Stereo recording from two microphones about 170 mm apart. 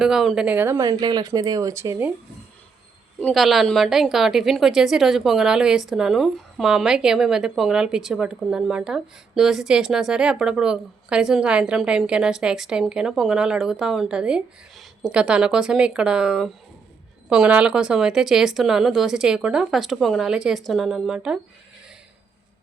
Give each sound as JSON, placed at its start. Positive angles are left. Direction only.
{"t": 0.0, "sound": "speech", "side_deg": 0}
{"t": 3.2, "sound": "a woman's voice", "side_deg": 5}